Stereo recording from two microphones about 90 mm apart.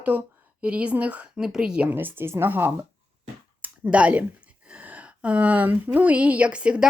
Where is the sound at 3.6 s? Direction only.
15° right (ahead or behind).